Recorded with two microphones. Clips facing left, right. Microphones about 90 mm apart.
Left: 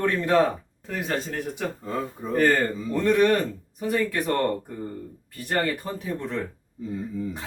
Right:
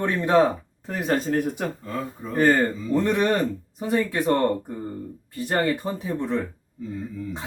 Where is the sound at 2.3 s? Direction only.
20° right (ahead or behind).